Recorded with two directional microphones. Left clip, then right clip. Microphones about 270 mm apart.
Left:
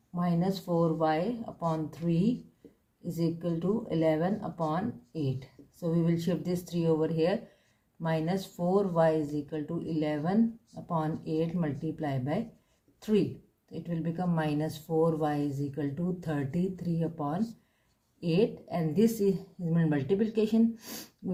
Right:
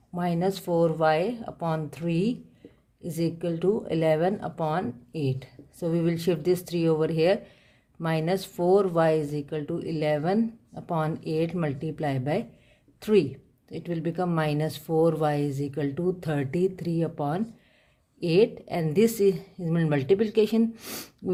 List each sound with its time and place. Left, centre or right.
0.2 s speech: right